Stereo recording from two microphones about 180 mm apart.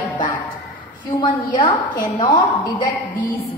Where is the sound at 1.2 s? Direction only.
25° left (ahead or behind).